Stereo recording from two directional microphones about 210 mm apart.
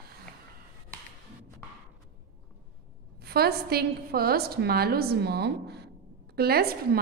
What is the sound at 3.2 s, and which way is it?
A woman's voice, 50° right (ahead or behind).